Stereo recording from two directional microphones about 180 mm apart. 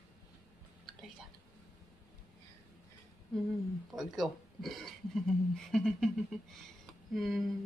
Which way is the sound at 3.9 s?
Centre (ahead or behind).